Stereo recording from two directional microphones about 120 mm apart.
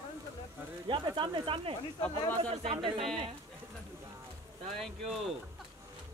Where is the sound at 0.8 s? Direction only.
45° right (ahead or behind).